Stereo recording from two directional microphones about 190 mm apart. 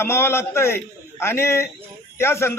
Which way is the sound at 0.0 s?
15° left (ahead or behind).